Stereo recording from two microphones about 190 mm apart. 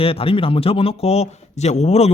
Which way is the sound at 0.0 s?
30° left (ahead or behind).